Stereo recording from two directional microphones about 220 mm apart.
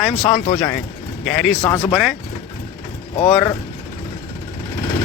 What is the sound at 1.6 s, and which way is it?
Speech, 20° left (ahead or behind).